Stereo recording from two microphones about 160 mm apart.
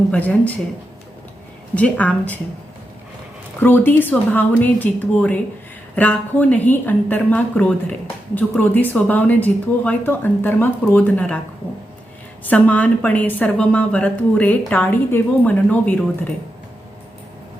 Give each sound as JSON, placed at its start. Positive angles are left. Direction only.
{"t": 0.1, "sound": "a woman's voice", "side_deg": 10}
{"t": 1.7, "sound": "a woman's voice", "side_deg": 10}
{"t": 3.6, "sound": "a woman's voice", "side_deg": 15}
{"t": 12.5, "sound": "a woman's voice", "side_deg": 10}